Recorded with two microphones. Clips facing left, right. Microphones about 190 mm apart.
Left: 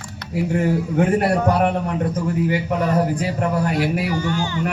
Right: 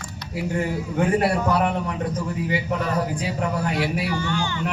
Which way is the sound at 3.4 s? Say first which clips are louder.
Left 3 dB; 45° left (ahead or behind).